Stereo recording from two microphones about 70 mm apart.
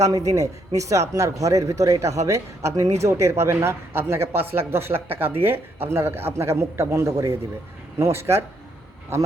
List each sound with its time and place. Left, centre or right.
0.0 s a man's voice: right